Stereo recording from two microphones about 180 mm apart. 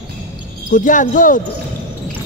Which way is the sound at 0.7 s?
45° left (ahead or behind).